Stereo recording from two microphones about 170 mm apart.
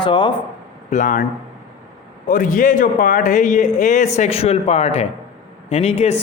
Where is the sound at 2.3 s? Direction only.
50° left (ahead or behind).